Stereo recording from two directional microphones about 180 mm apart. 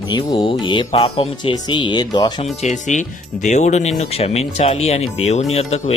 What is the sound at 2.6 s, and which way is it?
Speech, 40° left (ahead or behind).